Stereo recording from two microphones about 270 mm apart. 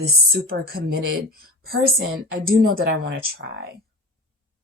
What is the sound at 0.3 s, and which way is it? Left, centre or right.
A woman's voice, right.